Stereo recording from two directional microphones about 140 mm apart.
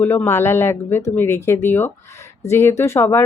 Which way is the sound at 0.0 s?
15° left (ahead or behind).